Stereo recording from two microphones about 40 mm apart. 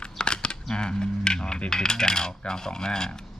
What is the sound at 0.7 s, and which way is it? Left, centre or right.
Coin, centre.